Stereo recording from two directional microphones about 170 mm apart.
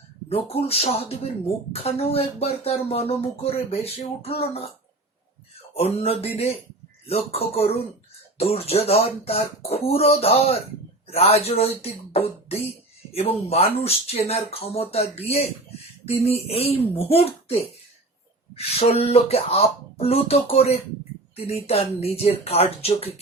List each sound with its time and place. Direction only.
0.3 s speech: 35° left (ahead or behind)
6.0 s speech: 35° left (ahead or behind)